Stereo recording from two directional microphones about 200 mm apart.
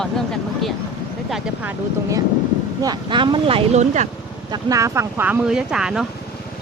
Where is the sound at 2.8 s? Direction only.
20° right (ahead or behind).